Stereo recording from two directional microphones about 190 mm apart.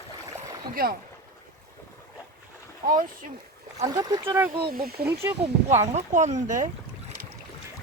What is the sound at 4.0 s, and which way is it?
Speech, 20° right (ahead or behind).